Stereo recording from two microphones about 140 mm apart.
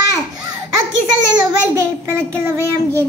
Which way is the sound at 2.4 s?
20° right (ahead or behind).